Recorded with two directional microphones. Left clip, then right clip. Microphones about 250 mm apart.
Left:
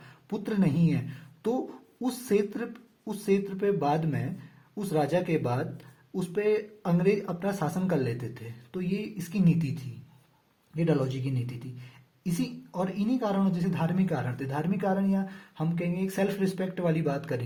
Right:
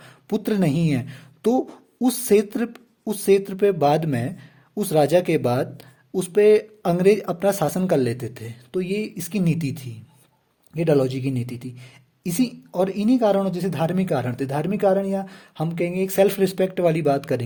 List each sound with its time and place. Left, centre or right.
0.3 s speech: right
10.8 s speech: right